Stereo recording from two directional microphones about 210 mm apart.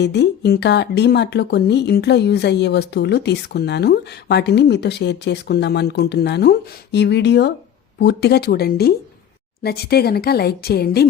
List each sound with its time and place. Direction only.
0.0 s speech: 55° left (ahead or behind)